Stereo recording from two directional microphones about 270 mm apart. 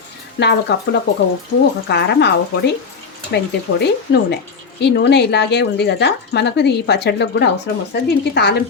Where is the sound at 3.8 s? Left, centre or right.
Left.